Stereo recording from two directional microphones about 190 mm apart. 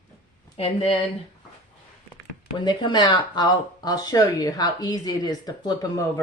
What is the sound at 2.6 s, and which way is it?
Speech, 25° left (ahead or behind).